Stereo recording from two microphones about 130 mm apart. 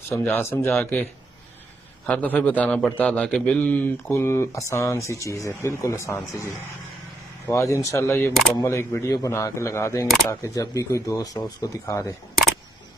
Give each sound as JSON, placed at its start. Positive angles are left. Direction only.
{"t": 0.1, "sound": "a man's voice", "side_deg": 15}
{"t": 2.0, "sound": "a man's voice", "side_deg": 10}
{"t": 7.4, "sound": "speech", "side_deg": 20}
{"t": 8.3, "sound": "speech", "side_deg": 0}
{"t": 8.6, "sound": "speech", "side_deg": 20}